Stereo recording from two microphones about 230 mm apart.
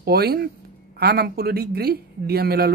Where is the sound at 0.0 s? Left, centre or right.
Right.